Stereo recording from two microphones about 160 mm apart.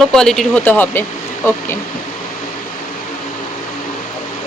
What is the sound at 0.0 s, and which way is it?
Speech, 5° left (ahead or behind).